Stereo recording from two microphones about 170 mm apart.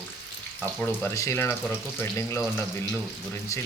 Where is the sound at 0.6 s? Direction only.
10° left (ahead or behind).